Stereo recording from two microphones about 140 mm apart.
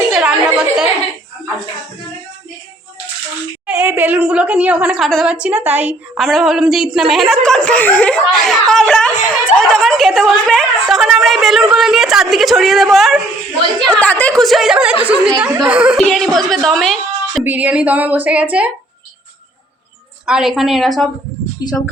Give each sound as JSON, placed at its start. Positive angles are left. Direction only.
{"t": 0.1, "sound": "a sound", "side_deg": -5}
{"t": 3.7, "sound": "a woman's voice", "side_deg": -15}
{"t": 6.1, "sound": "a woman's voice", "side_deg": 0}
{"t": 17.4, "sound": "a woman's voice", "side_deg": -10}
{"t": 20.2, "sound": "a woman's voice", "side_deg": -5}
{"t": 21.6, "sound": "speech", "side_deg": 25}